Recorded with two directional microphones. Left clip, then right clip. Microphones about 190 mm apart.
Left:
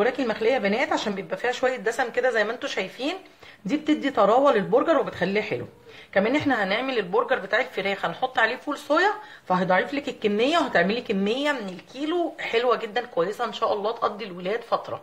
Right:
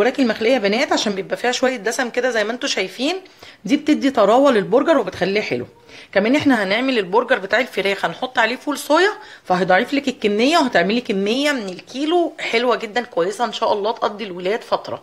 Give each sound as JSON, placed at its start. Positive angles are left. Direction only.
{"t": 0.0, "sound": "a woman's voice", "side_deg": -50}